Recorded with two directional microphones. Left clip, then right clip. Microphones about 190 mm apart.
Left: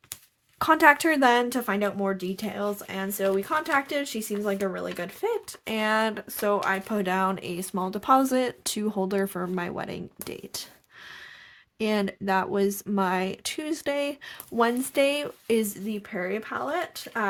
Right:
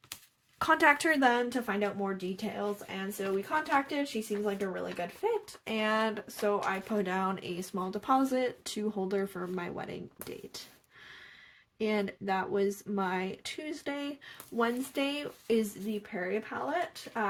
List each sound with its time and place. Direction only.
0.6 s speech: 30° left (ahead or behind); by 5.0 s 55° left (ahead or behind)
5.6 s speech: 40° left (ahead or behind)
11.8 s speech: 45° left (ahead or behind)